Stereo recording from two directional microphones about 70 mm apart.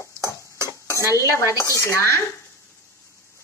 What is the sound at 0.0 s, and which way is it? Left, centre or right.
Stir, left.